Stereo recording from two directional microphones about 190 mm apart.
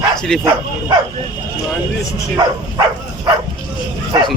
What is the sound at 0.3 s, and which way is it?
Speech, 5° left (ahead or behind).